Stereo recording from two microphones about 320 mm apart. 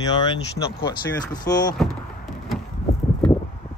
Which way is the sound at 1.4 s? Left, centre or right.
Centre.